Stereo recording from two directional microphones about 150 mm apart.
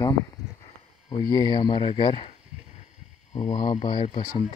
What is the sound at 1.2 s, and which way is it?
Speech, 25° left (ahead or behind).